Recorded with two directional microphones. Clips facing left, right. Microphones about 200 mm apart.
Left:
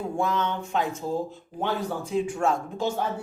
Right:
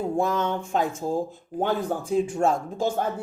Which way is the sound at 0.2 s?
45° right (ahead or behind).